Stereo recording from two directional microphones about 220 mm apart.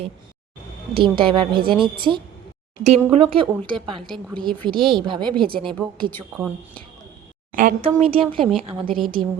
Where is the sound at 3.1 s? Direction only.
25° right (ahead or behind).